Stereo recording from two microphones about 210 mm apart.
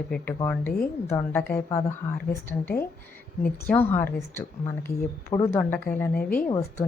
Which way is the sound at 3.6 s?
10° left (ahead or behind).